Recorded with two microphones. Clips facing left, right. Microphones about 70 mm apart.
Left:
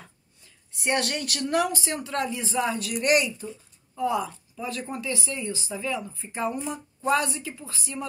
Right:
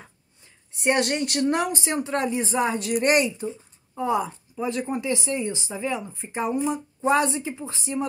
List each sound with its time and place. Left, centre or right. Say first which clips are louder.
0.7 s speech: right 4 dB; right